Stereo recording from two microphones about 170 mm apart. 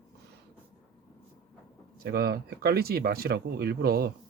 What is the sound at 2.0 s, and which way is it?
Speech, 65° right (ahead or behind).